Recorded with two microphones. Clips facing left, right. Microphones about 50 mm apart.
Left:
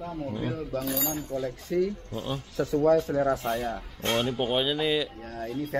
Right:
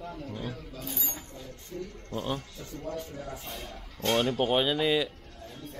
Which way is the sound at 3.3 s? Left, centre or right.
Left.